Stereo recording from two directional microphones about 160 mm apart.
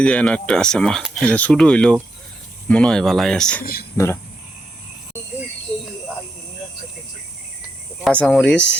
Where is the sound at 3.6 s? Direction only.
70° left (ahead or behind).